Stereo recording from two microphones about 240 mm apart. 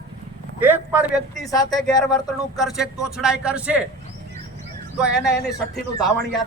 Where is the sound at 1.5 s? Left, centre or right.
Centre.